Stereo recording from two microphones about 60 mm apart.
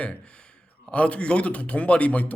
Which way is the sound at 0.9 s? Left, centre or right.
Left.